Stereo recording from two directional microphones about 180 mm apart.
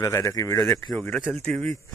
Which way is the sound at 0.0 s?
15° left (ahead or behind).